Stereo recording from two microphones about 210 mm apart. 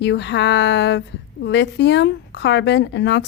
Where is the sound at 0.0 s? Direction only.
55° left (ahead or behind).